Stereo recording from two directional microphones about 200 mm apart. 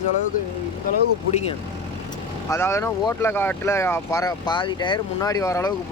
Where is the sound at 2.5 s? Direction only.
15° left (ahead or behind).